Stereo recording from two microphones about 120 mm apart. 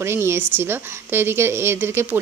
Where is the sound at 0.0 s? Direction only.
20° right (ahead or behind).